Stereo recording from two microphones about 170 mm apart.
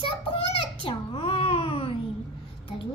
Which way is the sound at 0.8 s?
35° left (ahead or behind).